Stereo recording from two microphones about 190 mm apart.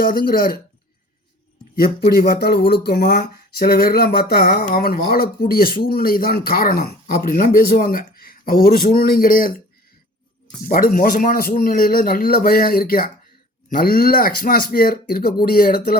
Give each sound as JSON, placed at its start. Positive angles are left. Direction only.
{"t": 0.0, "sound": "speech", "side_deg": 50}
{"t": 2.0, "sound": "speech", "side_deg": 55}
{"t": 10.7, "sound": "speech", "side_deg": 50}